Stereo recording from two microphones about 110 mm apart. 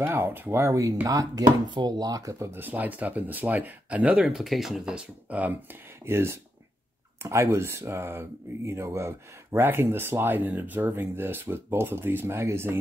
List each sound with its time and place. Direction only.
0.0 s speech: 20° right (ahead or behind)